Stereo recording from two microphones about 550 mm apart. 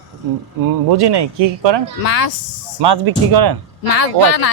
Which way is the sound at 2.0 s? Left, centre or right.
Left.